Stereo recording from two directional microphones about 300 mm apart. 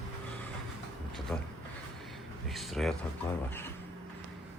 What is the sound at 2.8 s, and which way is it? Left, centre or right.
Speech, centre.